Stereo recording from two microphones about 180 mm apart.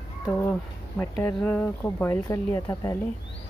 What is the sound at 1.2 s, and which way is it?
Speech, 10° left (ahead or behind).